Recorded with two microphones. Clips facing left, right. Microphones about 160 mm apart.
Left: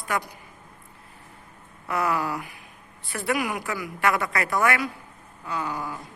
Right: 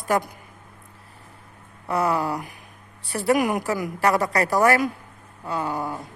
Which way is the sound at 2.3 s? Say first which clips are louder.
Right 3 dB; 40° right (ahead or behind).